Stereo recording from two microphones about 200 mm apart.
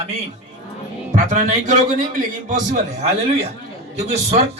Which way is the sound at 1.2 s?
40° right (ahead or behind).